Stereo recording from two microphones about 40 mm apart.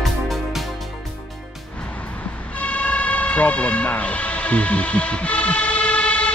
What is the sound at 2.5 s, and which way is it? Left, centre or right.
Vehicle, left.